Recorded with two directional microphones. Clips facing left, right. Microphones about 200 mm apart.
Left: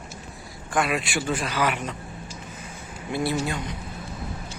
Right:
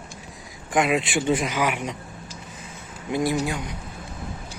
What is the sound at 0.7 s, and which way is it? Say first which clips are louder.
A man's voice: right 3 dB; 20° right (ahead or behind).